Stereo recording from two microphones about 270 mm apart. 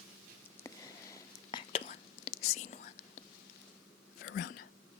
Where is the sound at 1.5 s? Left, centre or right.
Centre.